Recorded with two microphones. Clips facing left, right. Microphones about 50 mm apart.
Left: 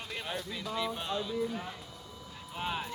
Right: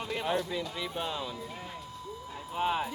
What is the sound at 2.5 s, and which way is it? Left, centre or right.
Speech, centre.